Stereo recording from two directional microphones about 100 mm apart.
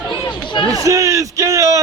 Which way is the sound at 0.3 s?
45° left (ahead or behind).